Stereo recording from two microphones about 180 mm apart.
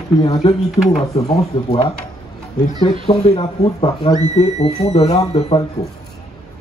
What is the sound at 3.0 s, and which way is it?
Speech, 35° left (ahead or behind).